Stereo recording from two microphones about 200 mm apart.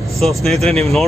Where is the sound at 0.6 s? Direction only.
30° right (ahead or behind).